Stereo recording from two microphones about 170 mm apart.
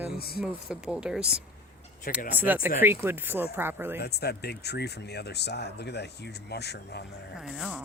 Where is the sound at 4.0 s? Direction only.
70° left (ahead or behind).